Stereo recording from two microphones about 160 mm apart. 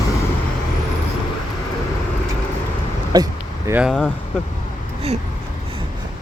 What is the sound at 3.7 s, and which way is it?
Speech, 5° right (ahead or behind).